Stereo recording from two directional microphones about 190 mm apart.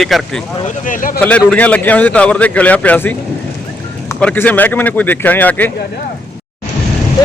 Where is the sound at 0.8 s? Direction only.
45° left (ahead or behind).